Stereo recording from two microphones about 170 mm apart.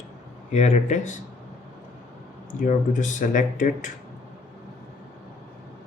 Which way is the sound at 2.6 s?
50° left (ahead or behind).